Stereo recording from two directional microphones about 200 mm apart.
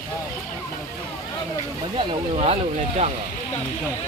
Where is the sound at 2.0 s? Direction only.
30° right (ahead or behind).